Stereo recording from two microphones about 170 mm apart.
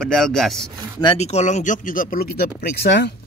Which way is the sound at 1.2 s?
40° left (ahead or behind).